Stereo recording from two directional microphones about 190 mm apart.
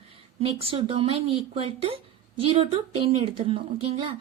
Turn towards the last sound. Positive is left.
turn(degrees=-30)  # may be behind; listen again after turning